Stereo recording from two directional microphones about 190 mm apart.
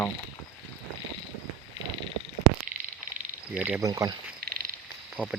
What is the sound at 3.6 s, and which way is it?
Speech, 10° right (ahead or behind).